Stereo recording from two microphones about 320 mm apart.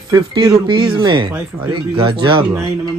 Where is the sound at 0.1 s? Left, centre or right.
Centre.